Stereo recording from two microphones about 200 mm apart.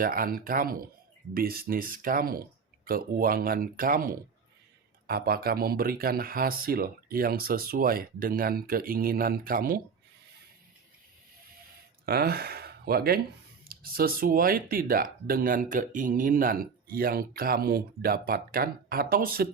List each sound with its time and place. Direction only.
0.0 s speech: 45° right (ahead or behind)
12.0 s speech: 50° right (ahead or behind)